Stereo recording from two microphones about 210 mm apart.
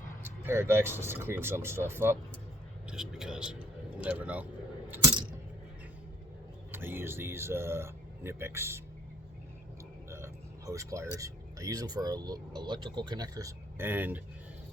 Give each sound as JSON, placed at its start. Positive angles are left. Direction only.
{"t": 0.2, "sound": "speech", "side_deg": -10}
{"t": 4.9, "sound": "coin", "side_deg": -15}
{"t": 6.7, "sound": "speech", "side_deg": -10}
{"t": 10.7, "sound": "speech", "side_deg": -15}